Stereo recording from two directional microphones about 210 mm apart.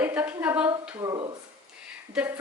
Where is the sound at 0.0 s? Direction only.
5° right (ahead or behind).